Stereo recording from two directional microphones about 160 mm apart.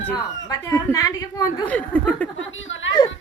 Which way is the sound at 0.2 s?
25° left (ahead or behind).